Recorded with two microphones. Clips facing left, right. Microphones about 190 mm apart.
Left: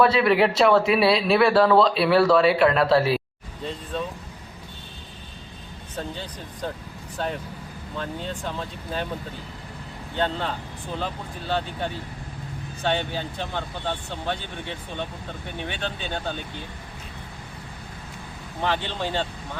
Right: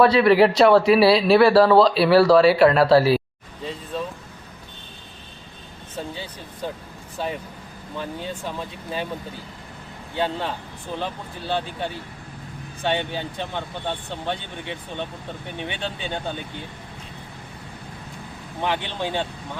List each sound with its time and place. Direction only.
0.0 s speech: centre (ahead or behind)
6.0 s speech: 5° right (ahead or behind)
10.2 s speech: 10° right (ahead or behind)
12.8 s speech: 15° right (ahead or behind)
18.6 s speech: 15° right (ahead or behind)